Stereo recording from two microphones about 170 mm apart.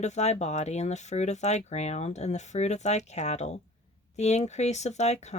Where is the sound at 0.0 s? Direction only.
40° left (ahead or behind).